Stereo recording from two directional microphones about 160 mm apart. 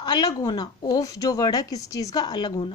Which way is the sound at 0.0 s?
25° left (ahead or behind).